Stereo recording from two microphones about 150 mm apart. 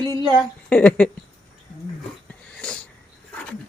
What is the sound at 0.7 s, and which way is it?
Speech, 10° left (ahead or behind).